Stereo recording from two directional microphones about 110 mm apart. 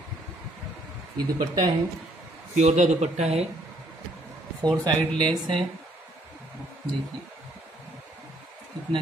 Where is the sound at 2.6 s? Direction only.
90° right.